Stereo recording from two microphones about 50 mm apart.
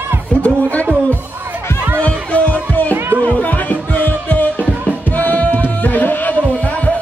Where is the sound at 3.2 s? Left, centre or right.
Left.